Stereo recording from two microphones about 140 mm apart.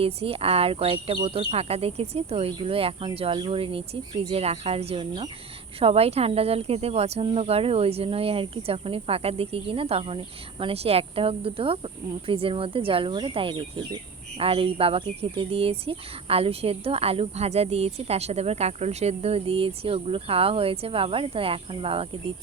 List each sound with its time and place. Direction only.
0.0 s speech: 45° right (ahead or behind)